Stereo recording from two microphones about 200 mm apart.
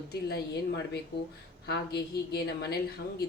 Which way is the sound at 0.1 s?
55° left (ahead or behind).